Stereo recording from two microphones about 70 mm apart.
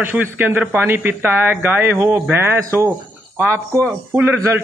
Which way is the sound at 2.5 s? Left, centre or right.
Right.